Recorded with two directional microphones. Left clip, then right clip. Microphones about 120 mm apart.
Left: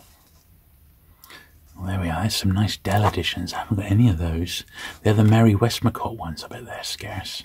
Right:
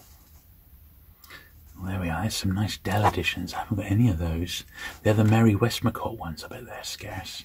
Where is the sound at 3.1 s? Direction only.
40° left (ahead or behind).